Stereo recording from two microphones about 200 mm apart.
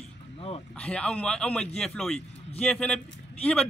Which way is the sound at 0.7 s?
5° left (ahead or behind).